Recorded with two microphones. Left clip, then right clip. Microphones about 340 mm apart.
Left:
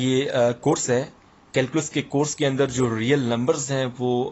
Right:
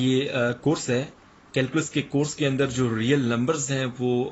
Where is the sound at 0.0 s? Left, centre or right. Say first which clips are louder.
Left 3 dB; centre.